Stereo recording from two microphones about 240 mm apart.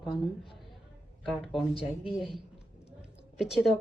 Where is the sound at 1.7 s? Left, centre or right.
Left.